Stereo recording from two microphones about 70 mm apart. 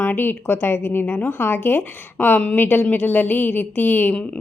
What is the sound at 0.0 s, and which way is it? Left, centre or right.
A woman's voice, left.